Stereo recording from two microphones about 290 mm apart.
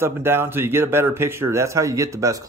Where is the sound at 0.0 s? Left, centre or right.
Centre.